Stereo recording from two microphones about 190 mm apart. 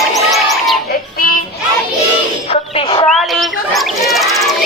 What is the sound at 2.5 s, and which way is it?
Music, 30° left (ahead or behind).